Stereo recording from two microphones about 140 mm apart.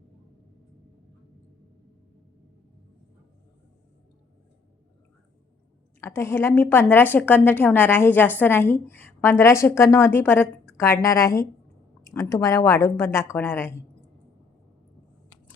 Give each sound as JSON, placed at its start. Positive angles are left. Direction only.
{"t": 6.0, "sound": "a woman's voice", "side_deg": 20}